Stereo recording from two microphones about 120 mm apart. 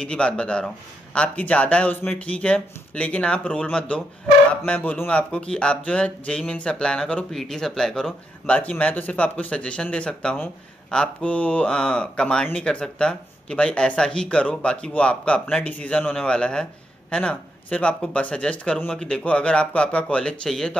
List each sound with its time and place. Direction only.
0.0 s speech: 10° left (ahead or behind)